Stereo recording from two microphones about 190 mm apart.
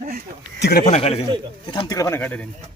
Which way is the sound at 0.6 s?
55° left (ahead or behind).